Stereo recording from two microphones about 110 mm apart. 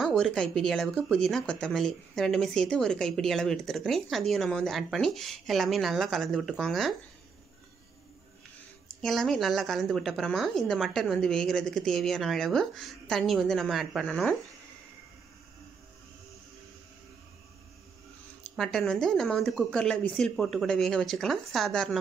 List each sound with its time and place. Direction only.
0.0 s speech: 5° left (ahead or behind)
9.0 s speech: 5° left (ahead or behind)
18.6 s speech: centre (ahead or behind)